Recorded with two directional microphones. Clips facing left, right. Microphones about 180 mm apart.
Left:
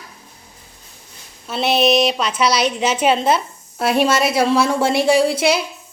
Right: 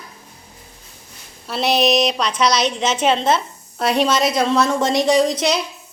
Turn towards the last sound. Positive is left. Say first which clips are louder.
# left 1 dB
turn(degrees=10)  # may be behind; listen again after turning